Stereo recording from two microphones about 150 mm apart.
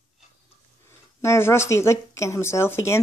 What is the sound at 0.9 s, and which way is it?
Speech, 15° left (ahead or behind).